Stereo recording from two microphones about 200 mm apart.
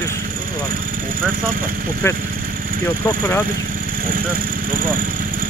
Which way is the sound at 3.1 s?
10° left (ahead or behind).